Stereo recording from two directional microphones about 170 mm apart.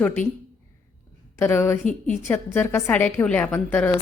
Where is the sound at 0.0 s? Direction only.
10° left (ahead or behind).